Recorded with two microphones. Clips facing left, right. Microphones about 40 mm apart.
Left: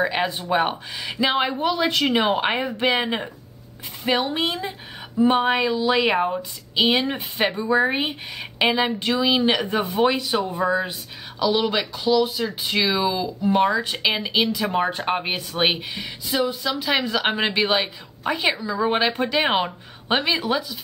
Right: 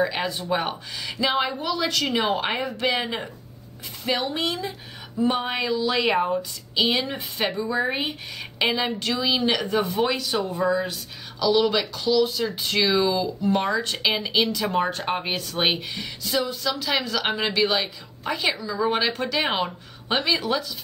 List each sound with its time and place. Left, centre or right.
0.2 s a woman's voice: left
6.2 s speech: left